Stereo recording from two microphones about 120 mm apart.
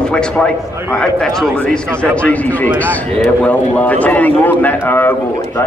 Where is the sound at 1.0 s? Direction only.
5° left (ahead or behind).